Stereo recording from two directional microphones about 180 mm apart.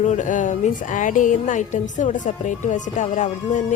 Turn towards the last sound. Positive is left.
turn(degrees=45)  # may be behind; listen again after turning